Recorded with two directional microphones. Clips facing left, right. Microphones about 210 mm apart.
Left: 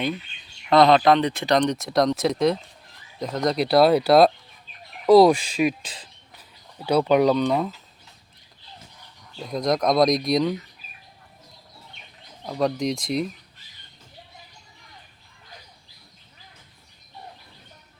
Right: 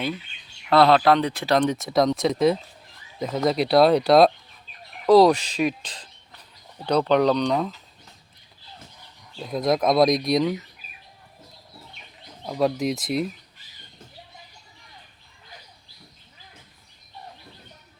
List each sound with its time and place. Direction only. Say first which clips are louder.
0.7 s speech: left 1 dB; 5° right (ahead or behind)
9.4 s speech: right 1 dB; centre (ahead or behind)
12.5 s speech: right 1 dB; 5° right (ahead or behind)